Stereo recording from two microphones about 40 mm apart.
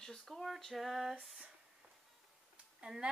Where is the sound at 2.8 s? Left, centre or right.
Centre.